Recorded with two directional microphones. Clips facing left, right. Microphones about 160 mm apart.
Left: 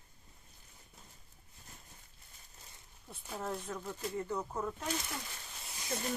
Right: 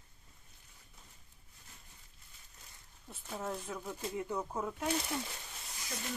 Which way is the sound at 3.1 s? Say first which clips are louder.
Even; centre (ahead or behind).